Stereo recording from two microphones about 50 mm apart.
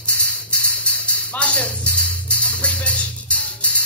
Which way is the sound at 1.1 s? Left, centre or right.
Left.